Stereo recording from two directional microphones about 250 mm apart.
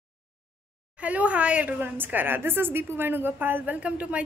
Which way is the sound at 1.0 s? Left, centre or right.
Centre.